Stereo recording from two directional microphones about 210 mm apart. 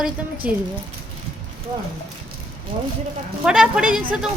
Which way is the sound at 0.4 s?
5° right (ahead or behind).